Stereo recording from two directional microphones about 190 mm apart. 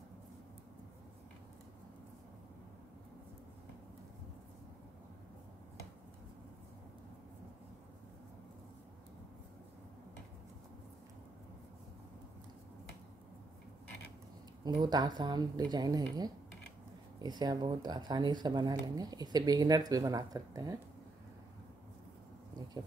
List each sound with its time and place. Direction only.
14.6 s speech: 20° right (ahead or behind)